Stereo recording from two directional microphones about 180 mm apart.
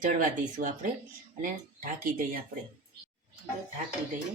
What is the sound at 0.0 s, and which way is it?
Speech, 45° right (ahead or behind).